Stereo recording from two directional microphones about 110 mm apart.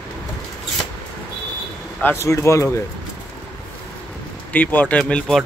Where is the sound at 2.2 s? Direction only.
25° left (ahead or behind).